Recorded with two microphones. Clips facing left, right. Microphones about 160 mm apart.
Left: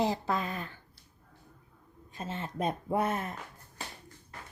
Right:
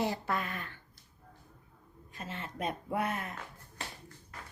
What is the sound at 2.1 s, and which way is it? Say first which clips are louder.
Speech: left 5 dB; 30° left (ahead or behind).